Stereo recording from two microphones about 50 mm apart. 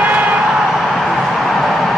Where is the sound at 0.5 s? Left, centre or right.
Centre.